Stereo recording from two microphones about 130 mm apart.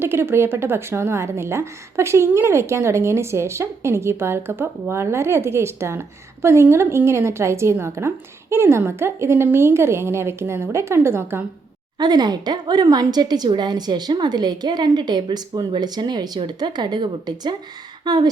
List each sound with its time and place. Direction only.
0.0 s a woman's voice: 20° right (ahead or behind)
11.9 s a woman's voice: 30° right (ahead or behind)